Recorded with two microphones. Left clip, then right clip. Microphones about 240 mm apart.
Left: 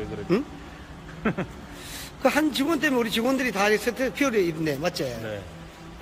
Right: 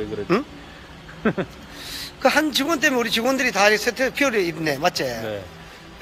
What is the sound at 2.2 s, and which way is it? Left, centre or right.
Speech, centre.